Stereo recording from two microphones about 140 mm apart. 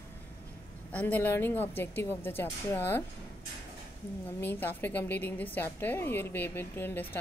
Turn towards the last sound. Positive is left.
turn(degrees=15)  # may be behind; listen again after turning